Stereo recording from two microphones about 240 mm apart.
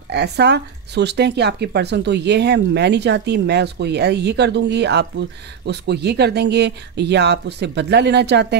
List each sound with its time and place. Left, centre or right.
0.1 s speech: right